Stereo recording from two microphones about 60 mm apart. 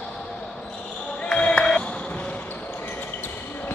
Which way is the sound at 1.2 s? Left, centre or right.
Centre.